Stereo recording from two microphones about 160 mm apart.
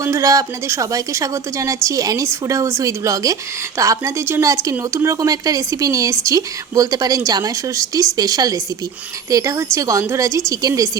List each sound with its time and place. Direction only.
0.0 s speech: 20° right (ahead or behind)